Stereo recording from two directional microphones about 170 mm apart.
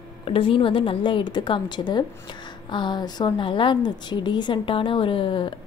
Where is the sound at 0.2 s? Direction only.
30° left (ahead or behind).